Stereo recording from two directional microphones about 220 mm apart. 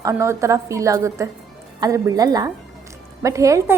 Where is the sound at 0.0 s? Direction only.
15° right (ahead or behind).